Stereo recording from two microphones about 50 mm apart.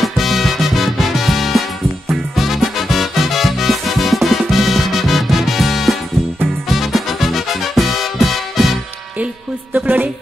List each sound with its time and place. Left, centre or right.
0.0 s music: centre
9.8 s speech: right